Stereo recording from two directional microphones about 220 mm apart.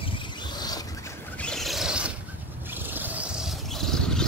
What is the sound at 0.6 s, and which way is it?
Owl, 15° left (ahead or behind).